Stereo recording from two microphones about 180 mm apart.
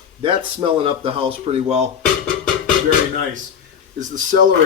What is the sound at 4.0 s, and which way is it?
Speech, 45° right (ahead or behind).